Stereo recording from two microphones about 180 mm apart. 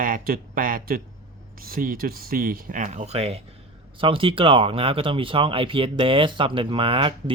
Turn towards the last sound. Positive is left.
turn(degrees=-30)  # may be behind; listen again after turning